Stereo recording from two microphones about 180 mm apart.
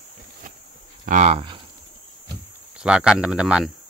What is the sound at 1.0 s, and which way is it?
Speech, 40° right (ahead or behind).